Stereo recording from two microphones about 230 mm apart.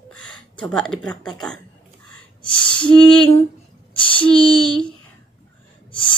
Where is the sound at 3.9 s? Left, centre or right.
Left.